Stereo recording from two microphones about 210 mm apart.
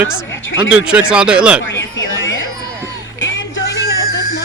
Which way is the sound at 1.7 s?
60° left (ahead or behind).